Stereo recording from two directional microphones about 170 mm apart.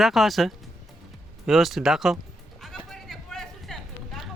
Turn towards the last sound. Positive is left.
turn(degrees=0)  # may be behind; listen again after turning